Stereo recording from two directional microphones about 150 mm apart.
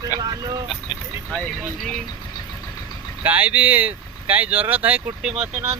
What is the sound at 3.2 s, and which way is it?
Speech, 10° right (ahead or behind).